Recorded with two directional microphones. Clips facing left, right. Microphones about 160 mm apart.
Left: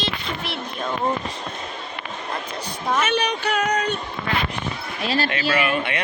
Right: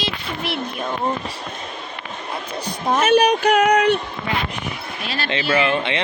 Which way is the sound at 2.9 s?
40° right (ahead or behind).